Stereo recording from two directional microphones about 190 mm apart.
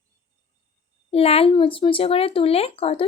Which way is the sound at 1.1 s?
30° left (ahead or behind).